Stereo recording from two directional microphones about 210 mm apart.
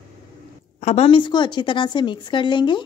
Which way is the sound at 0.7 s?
30° left (ahead or behind).